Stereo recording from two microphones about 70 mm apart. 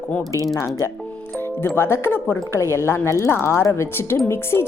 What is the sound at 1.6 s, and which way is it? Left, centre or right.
Speech, left.